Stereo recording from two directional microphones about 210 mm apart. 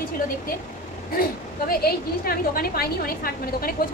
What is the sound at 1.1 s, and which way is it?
A woman's voice, 45° left (ahead or behind).